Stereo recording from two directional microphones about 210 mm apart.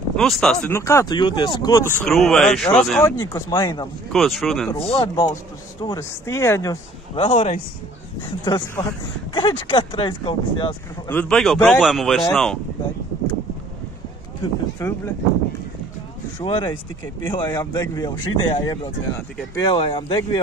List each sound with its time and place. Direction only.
0.1 s speech: centre (ahead or behind)
0.6 s speech: 15° left (ahead or behind)
4.1 s a man's voice: centre (ahead or behind)
4.7 s a man's voice: 25° left (ahead or behind)
8.5 s a man's voice: 20° left (ahead or behind)
11.1 s a man's voice: 5° left (ahead or behind)
14.8 s speech: 15° left (ahead or behind)
16.3 s a man's voice: 20° left (ahead or behind)